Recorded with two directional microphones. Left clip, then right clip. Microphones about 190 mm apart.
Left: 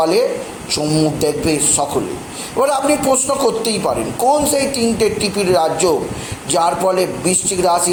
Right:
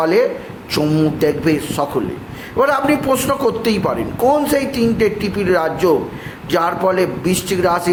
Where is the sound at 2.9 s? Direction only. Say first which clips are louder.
Left 1 dB; 15° right (ahead or behind).